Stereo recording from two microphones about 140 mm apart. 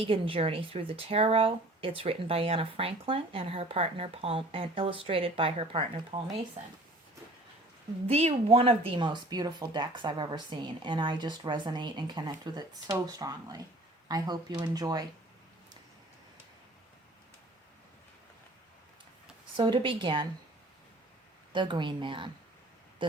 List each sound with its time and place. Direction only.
0.0 s speech: 45° right (ahead or behind)
8.0 s speech: 45° right (ahead or behind); by 15.0 s 30° right (ahead or behind)
19.5 s speech: 35° right (ahead or behind)
21.5 s speech: 35° right (ahead or behind)